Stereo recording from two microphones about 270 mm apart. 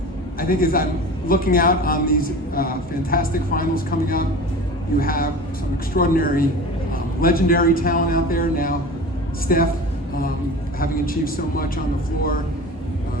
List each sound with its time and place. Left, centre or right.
0.3 s a man's voice: left
10.8 s a man's voice: left